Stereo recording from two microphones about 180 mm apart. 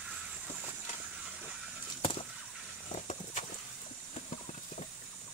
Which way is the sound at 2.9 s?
45° left (ahead or behind).